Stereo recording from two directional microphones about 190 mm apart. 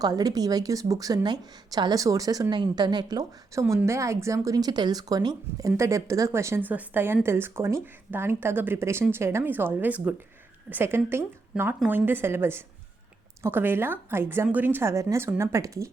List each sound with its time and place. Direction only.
0.0 s a woman's voice: 20° right (ahead or behind)